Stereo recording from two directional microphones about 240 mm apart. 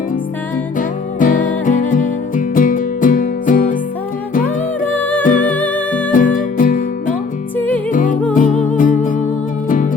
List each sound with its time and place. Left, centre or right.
0.8 s music: left
4.9 s music: centre
5.2 s music: left
5.5 s music: centre
6.1 s music: left